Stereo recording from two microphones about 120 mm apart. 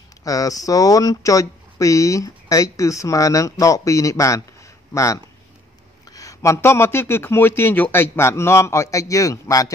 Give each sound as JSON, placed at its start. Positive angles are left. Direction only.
{"t": 0.2, "sound": "speech", "side_deg": 30}